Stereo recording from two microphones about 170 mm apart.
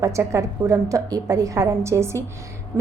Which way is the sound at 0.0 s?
15° right (ahead or behind).